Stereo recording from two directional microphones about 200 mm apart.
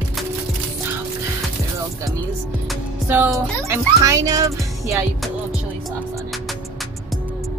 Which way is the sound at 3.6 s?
15° right (ahead or behind).